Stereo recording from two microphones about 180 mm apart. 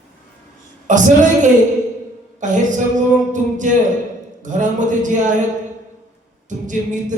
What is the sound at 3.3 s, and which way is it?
Music, 45° right (ahead or behind).